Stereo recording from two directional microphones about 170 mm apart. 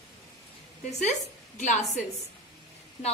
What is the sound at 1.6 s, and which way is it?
Speech, 45° left (ahead or behind).